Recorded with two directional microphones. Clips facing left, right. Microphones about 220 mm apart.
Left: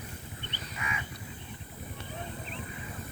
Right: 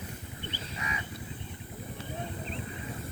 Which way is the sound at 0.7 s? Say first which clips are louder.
Left 1 dB; 35° right (ahead or behind).